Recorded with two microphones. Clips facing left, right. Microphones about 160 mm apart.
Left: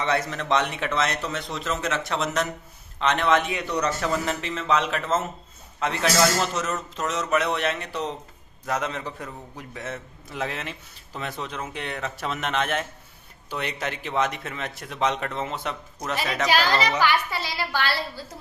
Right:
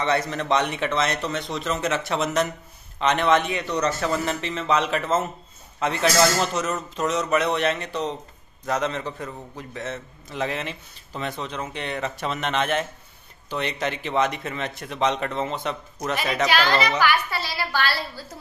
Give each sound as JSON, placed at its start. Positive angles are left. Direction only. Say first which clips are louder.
{"t": 0.0, "sound": "a man's voice", "louder": "right 2 dB", "side_deg": 5}
{"t": 17.0, "sound": "a woman's voice", "louder": "right 1 dB", "side_deg": 20}